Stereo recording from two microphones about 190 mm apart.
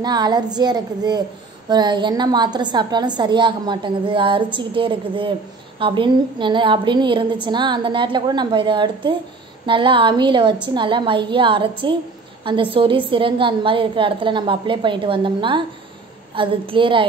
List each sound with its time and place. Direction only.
0.0 s a woman's voice: 20° right (ahead or behind)